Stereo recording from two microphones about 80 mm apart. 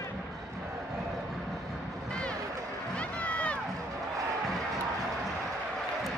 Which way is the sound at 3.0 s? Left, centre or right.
Centre.